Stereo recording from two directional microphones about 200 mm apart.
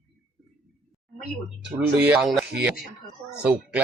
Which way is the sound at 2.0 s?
5° right (ahead or behind).